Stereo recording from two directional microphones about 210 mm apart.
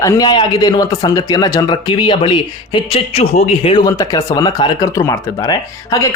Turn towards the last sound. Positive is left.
turn(degrees=15)  # may be behind; listen again after turning